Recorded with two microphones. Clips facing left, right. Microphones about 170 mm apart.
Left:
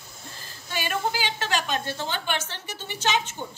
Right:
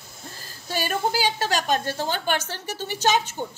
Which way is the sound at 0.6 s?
40° right (ahead or behind).